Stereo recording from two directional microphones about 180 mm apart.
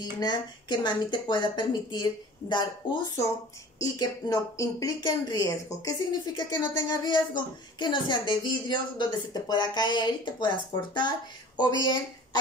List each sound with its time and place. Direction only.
0.0 s speech: 25° left (ahead or behind)